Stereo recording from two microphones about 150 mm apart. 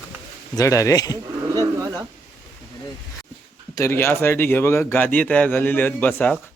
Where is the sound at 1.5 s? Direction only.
25° right (ahead or behind).